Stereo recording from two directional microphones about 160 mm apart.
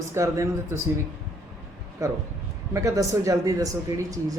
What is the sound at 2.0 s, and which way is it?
Speech, 20° right (ahead or behind).